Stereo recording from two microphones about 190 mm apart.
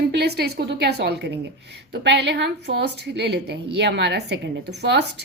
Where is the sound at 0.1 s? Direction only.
60° right (ahead or behind).